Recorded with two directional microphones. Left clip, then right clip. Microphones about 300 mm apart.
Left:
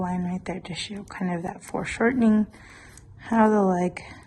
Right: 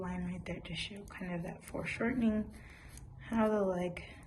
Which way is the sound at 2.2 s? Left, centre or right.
Centre.